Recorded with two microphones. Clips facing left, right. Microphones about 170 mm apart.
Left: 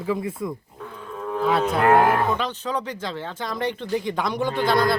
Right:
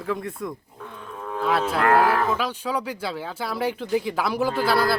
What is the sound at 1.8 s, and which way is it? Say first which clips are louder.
Speech: left 2 dB; 25° left (ahead or behind).